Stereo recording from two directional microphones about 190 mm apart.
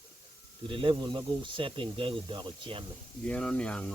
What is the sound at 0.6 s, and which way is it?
Speech, 25° right (ahead or behind).